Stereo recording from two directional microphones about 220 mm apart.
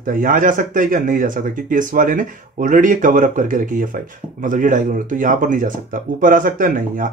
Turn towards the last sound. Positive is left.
turn(degrees=-40)  # may be behind; listen again after turning